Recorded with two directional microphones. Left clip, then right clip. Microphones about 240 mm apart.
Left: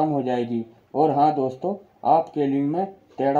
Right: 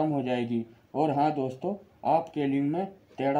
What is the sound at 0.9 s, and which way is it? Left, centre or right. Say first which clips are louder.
Speech: left 7 dB; centre.